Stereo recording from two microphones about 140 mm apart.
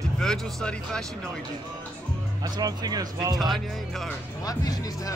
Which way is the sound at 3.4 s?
Centre (ahead or behind).